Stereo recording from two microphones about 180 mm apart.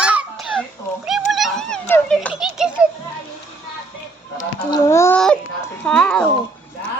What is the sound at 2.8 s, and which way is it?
Speech, 5° right (ahead or behind).